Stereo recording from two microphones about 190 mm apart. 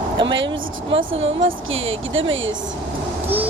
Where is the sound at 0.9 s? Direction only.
30° right (ahead or behind).